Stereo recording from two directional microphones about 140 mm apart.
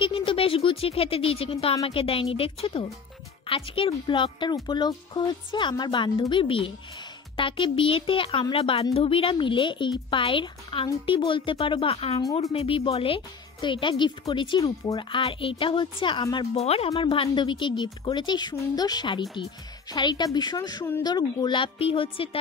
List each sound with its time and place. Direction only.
0.0 s speech: 40° left (ahead or behind)
14.6 s speech: 25° left (ahead or behind)
15.0 s speech: 40° left (ahead or behind)
16.5 s speech: 45° left (ahead or behind)